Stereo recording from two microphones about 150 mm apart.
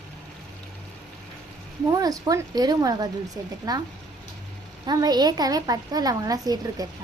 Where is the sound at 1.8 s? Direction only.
25° right (ahead or behind).